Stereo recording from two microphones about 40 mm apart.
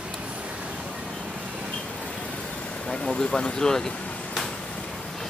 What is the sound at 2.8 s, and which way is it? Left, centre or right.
Speech, centre.